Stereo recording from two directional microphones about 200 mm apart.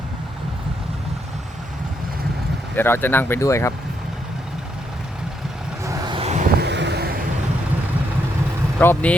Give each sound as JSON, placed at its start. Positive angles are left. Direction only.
{"t": 2.7, "sound": "speech", "side_deg": 10}
{"t": 5.8, "sound": "vehicle", "side_deg": -15}
{"t": 6.6, "sound": "vehicle", "side_deg": -60}
{"t": 8.8, "sound": "speech", "side_deg": 10}